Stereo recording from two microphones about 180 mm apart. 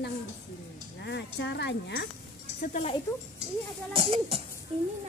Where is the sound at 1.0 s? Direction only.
70° left (ahead or behind).